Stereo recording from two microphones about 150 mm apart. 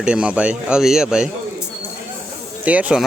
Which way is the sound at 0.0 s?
5° right (ahead or behind).